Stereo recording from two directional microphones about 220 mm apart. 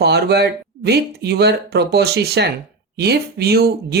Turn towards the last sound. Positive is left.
turn(degrees=-45)  # may be behind; listen again after turning